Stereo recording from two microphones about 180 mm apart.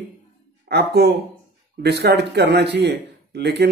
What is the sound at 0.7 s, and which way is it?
Speech, 65° right (ahead or behind).